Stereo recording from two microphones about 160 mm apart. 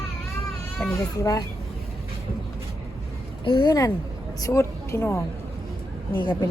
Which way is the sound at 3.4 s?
30° left (ahead or behind).